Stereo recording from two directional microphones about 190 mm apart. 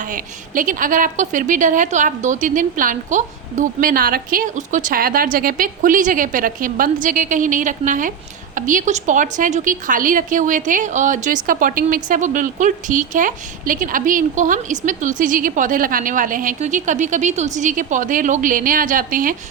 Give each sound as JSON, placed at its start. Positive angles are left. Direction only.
{"t": 0.0, "sound": "a woman's voice", "side_deg": -45}